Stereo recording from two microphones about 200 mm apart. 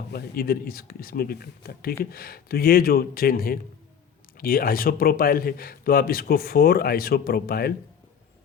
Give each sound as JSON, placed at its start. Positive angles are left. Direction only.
{"t": 0.1, "sound": "speech", "side_deg": 50}